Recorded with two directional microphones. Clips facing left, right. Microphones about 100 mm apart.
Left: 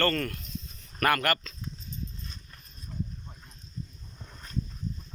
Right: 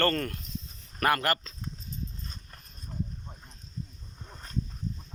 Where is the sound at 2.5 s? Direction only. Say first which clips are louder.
Even; 45° right (ahead or behind).